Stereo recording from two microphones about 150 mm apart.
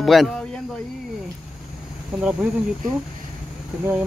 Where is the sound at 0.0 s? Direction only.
Centre (ahead or behind).